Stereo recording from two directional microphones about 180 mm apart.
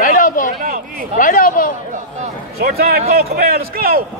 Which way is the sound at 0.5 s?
50° right (ahead or behind).